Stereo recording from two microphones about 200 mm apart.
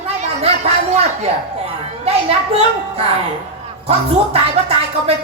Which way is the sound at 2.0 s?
30° right (ahead or behind).